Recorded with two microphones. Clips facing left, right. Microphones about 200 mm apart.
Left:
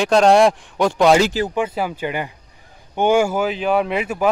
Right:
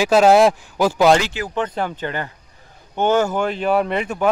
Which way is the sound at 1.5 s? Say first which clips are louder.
Left 1 dB; 10° left (ahead or behind).